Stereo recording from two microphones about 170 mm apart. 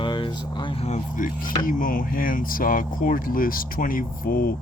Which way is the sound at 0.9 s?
50° left (ahead or behind).